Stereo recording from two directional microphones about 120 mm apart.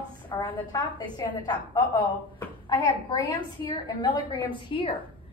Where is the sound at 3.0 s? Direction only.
35° left (ahead or behind).